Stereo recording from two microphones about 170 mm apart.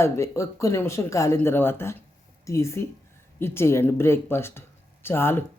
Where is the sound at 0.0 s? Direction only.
15° left (ahead or behind).